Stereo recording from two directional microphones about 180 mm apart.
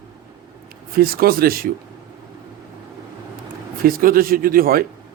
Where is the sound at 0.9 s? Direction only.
55° right (ahead or behind).